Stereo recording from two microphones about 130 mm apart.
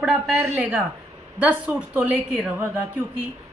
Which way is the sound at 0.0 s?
10° right (ahead or behind).